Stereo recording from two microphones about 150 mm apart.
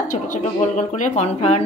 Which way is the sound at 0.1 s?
55° left (ahead or behind).